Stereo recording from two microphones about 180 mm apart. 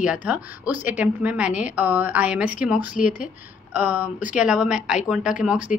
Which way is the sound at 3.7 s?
10° right (ahead or behind).